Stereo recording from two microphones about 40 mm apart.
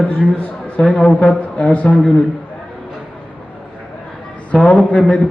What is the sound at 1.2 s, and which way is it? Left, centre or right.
Speech, left.